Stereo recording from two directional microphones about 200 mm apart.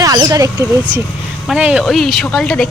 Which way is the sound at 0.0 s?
15° right (ahead or behind).